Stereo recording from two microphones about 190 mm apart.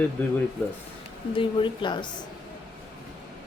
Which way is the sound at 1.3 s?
25° left (ahead or behind).